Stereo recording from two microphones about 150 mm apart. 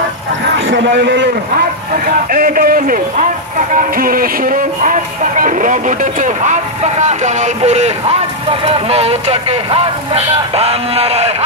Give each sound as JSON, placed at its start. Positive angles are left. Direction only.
{"t": 2.0, "sound": "a man's voice", "side_deg": -70}